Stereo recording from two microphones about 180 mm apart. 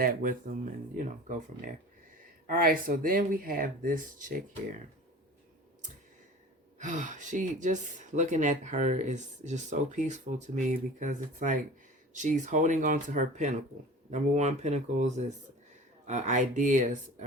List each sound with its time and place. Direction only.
0.0 s speech: 50° right (ahead or behind)
6.7 s speech: 45° right (ahead or behind)